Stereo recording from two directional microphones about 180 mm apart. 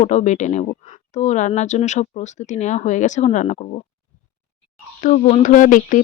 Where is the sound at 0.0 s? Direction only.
40° left (ahead or behind).